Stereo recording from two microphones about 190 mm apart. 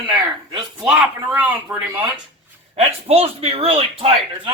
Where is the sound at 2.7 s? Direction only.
35° right (ahead or behind).